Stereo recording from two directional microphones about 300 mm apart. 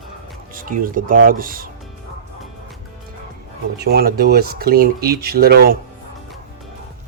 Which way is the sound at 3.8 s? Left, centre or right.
Right.